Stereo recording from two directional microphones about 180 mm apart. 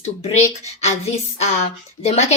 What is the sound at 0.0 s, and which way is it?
A woman's voice, 35° left (ahead or behind).